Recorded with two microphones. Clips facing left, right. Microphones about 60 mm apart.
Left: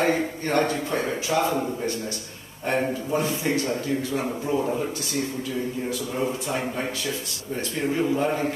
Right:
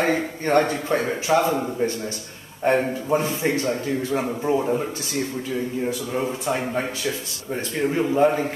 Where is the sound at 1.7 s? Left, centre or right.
Right.